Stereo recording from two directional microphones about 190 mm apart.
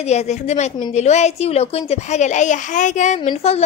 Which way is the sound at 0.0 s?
35° left (ahead or behind).